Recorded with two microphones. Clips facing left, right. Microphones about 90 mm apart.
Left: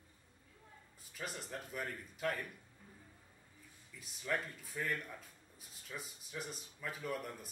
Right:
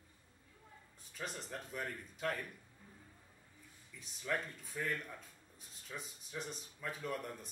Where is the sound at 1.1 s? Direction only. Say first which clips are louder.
Even; 5° left (ahead or behind).